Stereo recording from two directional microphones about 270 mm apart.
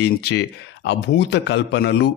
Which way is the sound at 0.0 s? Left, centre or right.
Left.